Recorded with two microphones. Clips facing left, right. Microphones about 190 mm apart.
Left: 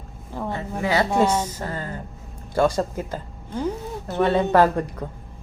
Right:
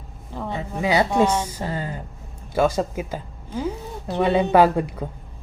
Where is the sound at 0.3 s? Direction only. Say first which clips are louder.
Even; 5° left (ahead or behind).